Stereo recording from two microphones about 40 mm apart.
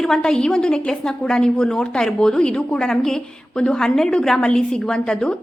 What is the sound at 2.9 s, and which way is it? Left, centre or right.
A woman's voice, centre.